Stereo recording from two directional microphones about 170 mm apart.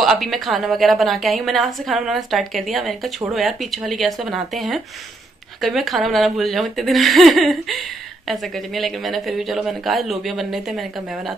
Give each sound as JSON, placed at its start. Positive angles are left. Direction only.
{"t": 0.0, "sound": "a woman's voice", "side_deg": 0}